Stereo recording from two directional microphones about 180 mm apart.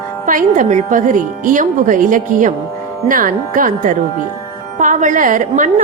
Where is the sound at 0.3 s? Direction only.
50° right (ahead or behind).